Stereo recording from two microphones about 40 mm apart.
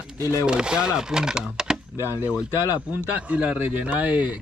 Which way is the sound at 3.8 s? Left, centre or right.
Right.